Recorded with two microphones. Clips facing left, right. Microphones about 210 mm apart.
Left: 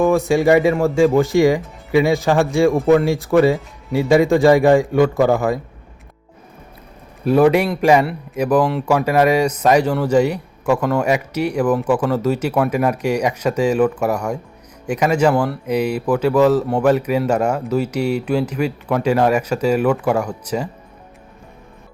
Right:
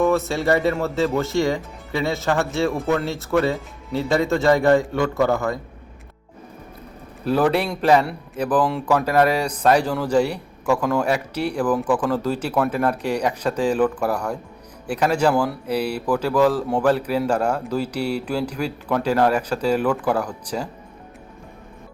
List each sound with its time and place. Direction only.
0.1 s speech: 15° left (ahead or behind)
0.7 s speech: centre (ahead or behind)
0.9 s speech: 15° left (ahead or behind)
3.9 s speech: 15° left (ahead or behind)
7.3 s speech: 10° left (ahead or behind)
15.3 s speech: 5° right (ahead or behind)
15.6 s speech: 10° left (ahead or behind)